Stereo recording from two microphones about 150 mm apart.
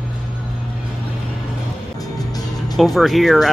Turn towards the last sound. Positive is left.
turn(degrees=0)  # may be behind; listen again after turning